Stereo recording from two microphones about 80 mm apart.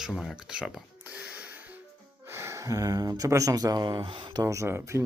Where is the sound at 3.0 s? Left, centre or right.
Right.